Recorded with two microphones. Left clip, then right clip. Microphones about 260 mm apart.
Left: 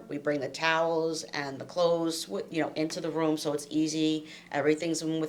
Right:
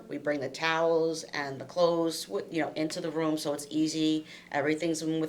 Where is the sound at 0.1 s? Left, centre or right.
Left.